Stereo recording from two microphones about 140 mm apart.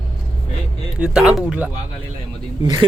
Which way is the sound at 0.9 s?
5° right (ahead or behind).